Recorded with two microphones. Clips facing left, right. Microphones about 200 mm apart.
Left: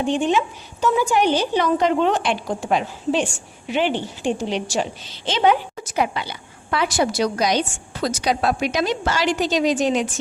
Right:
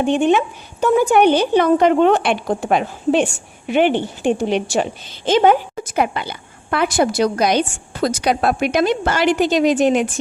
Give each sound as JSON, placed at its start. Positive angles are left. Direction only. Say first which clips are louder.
{"t": 0.0, "sound": "a woman's voice", "louder": "right 4 dB", "side_deg": -60}